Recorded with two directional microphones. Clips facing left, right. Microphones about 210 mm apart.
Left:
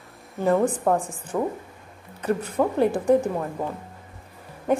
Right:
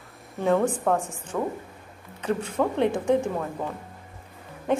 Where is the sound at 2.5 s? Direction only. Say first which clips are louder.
Left 2 dB; 5° left (ahead or behind).